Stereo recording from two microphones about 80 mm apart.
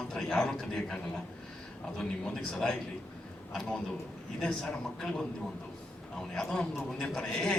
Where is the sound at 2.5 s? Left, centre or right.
Centre.